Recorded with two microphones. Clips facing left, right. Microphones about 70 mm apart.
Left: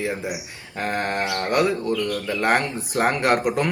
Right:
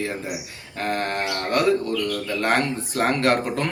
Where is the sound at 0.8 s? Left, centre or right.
Centre.